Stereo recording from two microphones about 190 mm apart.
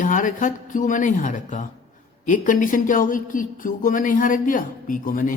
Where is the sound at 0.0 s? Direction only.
45° left (ahead or behind).